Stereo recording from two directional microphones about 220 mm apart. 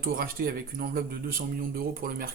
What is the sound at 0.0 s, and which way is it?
Speech, 40° right (ahead or behind).